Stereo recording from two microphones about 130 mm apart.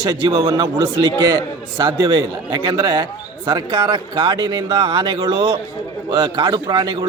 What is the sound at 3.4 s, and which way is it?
A man's voice, 40° right (ahead or behind).